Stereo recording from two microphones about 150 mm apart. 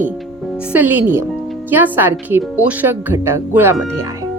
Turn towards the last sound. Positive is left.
turn(degrees=-20)  # may be behind; listen again after turning